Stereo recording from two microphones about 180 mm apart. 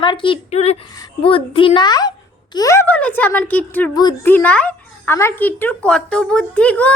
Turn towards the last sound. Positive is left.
turn(degrees=5)  # may be behind; listen again after turning